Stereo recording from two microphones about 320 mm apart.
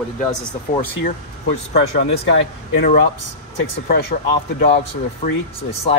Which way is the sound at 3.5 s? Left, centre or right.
Left.